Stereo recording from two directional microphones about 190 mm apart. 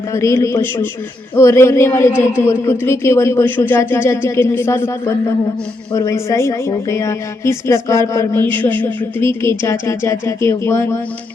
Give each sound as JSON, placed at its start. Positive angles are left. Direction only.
{"t": 0.1, "sound": "speech", "side_deg": 15}